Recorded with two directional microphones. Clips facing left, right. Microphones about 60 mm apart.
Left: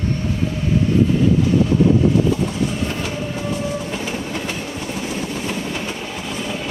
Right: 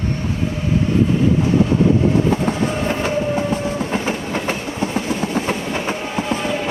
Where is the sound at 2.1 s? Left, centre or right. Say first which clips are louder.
Right 1 dB; right.